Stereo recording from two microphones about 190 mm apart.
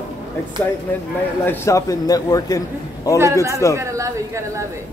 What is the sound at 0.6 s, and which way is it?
A man's voice, 10° left (ahead or behind).